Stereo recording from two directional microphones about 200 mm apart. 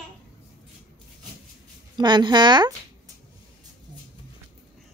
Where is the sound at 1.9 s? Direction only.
20° right (ahead or behind).